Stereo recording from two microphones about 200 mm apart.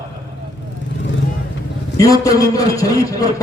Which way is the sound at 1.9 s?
15° left (ahead or behind).